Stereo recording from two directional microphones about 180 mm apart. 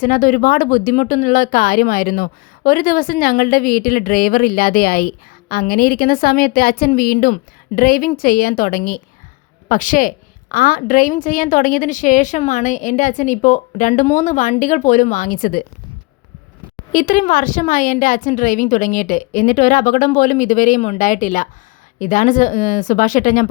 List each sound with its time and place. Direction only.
0.0 s a woman's voice: 45° left (ahead or behind)
16.9 s speech: 50° left (ahead or behind)